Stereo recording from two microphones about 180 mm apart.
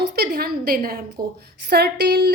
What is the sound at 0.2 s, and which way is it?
A woman's voice, 55° right (ahead or behind).